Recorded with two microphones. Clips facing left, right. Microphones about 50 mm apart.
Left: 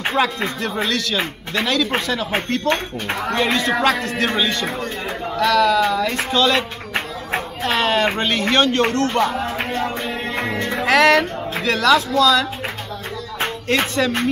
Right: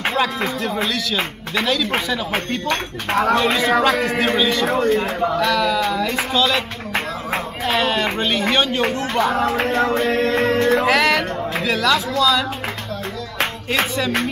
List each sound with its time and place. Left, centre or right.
0.2 s speech: centre
7.6 s speech: centre
9.4 s music: right
10.8 s speech: centre
13.7 s speech: centre